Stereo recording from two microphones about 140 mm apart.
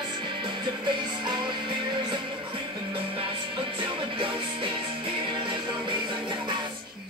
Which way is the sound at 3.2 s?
35° right (ahead or behind).